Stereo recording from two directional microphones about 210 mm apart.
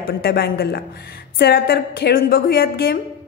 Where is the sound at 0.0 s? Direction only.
50° left (ahead or behind).